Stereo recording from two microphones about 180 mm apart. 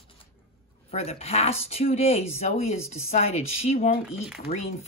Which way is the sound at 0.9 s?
35° left (ahead or behind).